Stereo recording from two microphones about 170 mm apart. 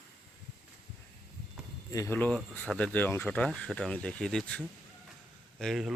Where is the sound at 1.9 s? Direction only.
15° left (ahead or behind).